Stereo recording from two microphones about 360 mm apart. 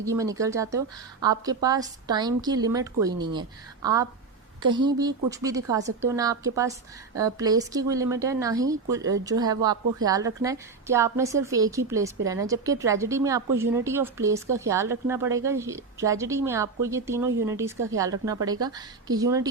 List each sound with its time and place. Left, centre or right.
0.0 s speech: centre
4.7 s speech: centre